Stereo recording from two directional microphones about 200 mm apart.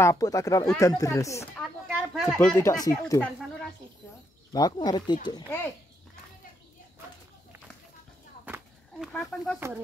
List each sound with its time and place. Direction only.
0.0 s speech: 15° left (ahead or behind)
1.9 s speech: 5° right (ahead or behind)
2.4 s speech: 15° left (ahead or behind)
4.5 s speech: 20° left (ahead or behind)
9.0 s speech: centre (ahead or behind)